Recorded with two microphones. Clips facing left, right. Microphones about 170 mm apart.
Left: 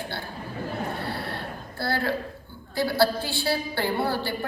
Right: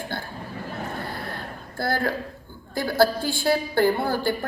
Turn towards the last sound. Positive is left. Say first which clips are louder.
# right 4 dB
turn(degrees=-50)  # may be behind; listen again after turning